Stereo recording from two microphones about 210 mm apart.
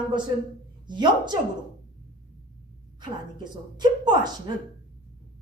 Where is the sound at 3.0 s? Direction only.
20° right (ahead or behind).